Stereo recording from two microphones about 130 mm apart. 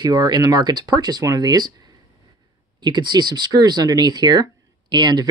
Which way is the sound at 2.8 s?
35° right (ahead or behind).